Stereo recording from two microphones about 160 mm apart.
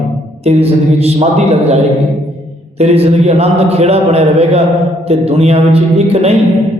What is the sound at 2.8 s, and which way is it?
A man's voice, 40° right (ahead or behind).